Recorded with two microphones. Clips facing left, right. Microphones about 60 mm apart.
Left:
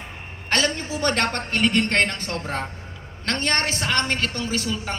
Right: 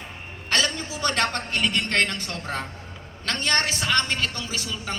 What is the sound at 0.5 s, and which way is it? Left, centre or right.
A woman's voice, left.